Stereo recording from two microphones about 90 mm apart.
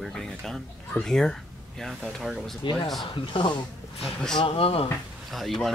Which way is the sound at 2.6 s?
65° left (ahead or behind).